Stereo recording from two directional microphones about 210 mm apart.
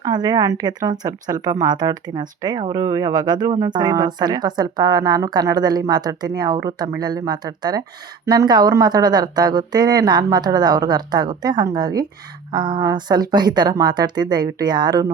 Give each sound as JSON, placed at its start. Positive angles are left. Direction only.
{"t": 0.0, "sound": "a woman's voice", "side_deg": -20}